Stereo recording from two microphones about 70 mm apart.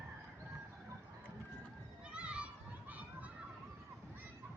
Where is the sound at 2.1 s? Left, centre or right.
Centre.